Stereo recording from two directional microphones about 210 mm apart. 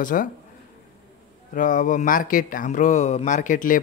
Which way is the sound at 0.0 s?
40° left (ahead or behind).